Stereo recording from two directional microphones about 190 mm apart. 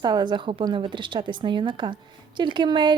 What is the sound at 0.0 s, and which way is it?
A woman's voice, 25° right (ahead or behind).